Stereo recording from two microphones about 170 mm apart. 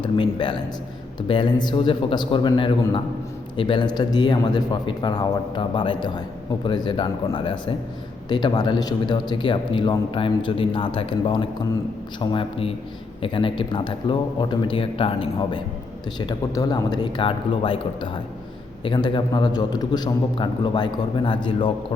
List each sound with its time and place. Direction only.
0.0 s a man's voice: 30° left (ahead or behind)